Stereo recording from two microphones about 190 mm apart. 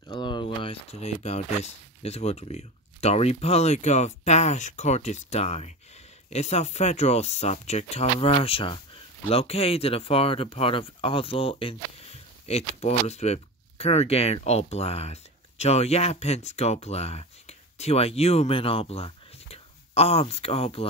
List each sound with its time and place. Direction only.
0.1 s speech: 25° left (ahead or behind)